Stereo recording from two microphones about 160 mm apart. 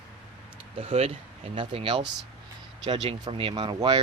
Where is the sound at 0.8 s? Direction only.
35° right (ahead or behind).